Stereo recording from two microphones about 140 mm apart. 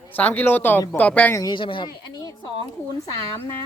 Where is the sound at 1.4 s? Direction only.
35° left (ahead or behind).